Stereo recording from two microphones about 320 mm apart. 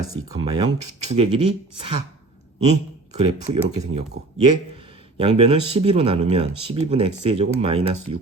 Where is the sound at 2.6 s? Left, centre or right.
Right.